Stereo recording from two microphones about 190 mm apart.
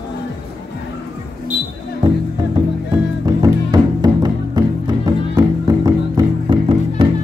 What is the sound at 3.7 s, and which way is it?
Music, 20° right (ahead or behind).